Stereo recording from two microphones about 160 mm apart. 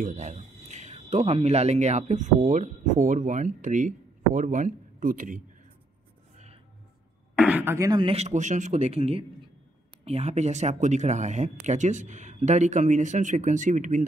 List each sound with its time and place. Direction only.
0.0 s speech: 50° right (ahead or behind)
6.3 s music: 40° right (ahead or behind)
7.3 s speech: 10° right (ahead or behind)
8.0 s a man's voice: 40° right (ahead or behind)